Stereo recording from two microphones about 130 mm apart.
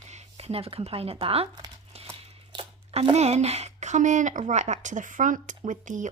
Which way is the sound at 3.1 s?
55° right (ahead or behind).